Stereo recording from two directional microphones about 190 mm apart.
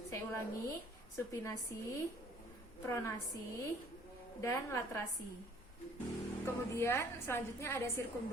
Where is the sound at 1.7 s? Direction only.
15° left (ahead or behind).